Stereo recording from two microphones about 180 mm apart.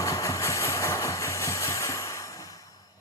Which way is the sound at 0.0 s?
20° left (ahead or behind).